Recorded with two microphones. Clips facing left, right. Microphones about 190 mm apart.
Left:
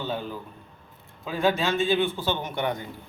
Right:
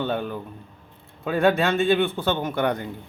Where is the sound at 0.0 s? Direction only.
60° right (ahead or behind).